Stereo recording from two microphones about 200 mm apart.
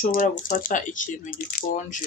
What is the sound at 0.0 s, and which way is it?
Speech, 40° left (ahead or behind).